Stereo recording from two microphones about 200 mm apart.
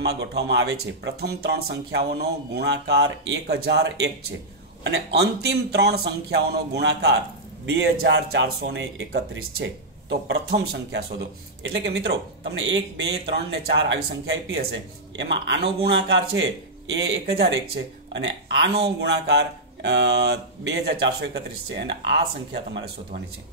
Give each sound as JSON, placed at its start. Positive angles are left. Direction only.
{"t": 0.0, "sound": "speech", "side_deg": -55}